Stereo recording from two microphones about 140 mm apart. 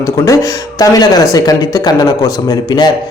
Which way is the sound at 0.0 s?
25° left (ahead or behind).